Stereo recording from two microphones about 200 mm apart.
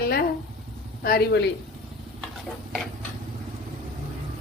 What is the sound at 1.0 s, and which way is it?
Speech, 50° left (ahead or behind).